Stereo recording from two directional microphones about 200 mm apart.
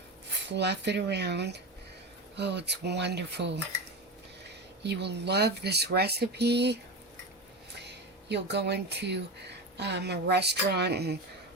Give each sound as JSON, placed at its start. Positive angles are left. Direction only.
{"t": 0.4, "sound": "speech", "side_deg": -60}
{"t": 7.8, "sound": "speech", "side_deg": -60}